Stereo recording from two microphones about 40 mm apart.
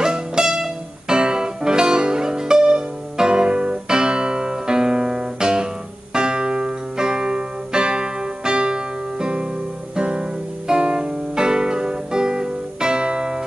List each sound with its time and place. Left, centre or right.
0.0 s music: centre
9.9 s guitar: right
10.7 s music: centre